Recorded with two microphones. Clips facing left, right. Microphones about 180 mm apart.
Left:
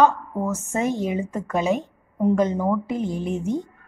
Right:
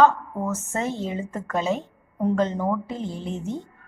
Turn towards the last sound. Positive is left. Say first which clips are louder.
# left 5 dB
turn(degrees=15)  # may be behind; listen again after turning